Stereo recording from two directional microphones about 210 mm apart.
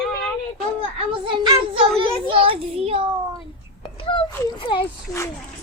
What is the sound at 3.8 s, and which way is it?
Wail, 25° left (ahead or behind).